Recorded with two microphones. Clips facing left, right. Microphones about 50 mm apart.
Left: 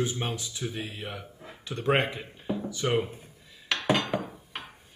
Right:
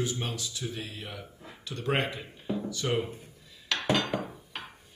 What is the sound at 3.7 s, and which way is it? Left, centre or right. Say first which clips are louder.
Dishes: left 2 dB; left.